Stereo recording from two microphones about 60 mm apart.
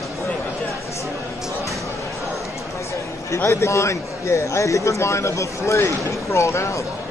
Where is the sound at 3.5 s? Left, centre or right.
Left.